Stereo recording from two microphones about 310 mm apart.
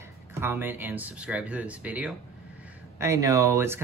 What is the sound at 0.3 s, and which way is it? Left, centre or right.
Speech, centre.